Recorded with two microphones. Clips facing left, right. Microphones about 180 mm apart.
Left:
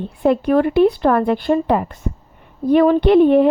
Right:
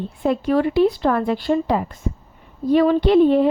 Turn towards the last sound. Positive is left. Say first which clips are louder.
# left 3 dB
turn(degrees=55)  # may be behind; listen again after turning